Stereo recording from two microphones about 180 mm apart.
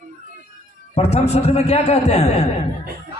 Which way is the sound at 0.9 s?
35° left (ahead or behind).